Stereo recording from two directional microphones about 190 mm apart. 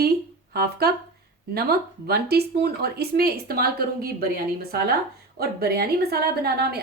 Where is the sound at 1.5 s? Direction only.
55° right (ahead or behind).